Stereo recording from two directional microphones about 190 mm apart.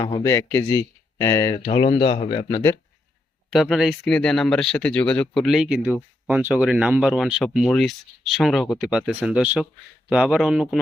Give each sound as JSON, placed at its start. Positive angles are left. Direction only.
{"t": 0.0, "sound": "speech", "side_deg": 20}
{"t": 3.5, "sound": "speech", "side_deg": 0}